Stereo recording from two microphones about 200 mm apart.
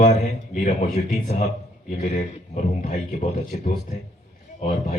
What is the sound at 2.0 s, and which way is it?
Speech, 35° left (ahead or behind).